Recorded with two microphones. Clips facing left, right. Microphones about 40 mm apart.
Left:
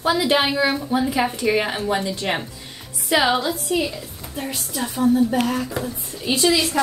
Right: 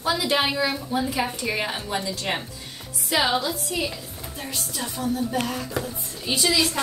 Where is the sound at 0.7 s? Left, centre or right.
Centre.